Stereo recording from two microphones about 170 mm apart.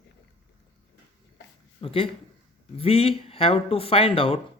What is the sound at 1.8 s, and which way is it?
A man's voice, 35° left (ahead or behind).